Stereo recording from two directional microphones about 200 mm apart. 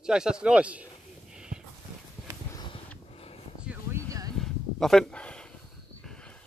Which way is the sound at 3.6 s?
5° right (ahead or behind).